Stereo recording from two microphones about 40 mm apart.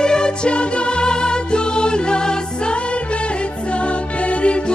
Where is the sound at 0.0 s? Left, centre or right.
Left.